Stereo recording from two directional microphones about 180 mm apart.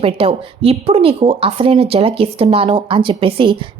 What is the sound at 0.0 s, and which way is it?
Speech, 30° right (ahead or behind).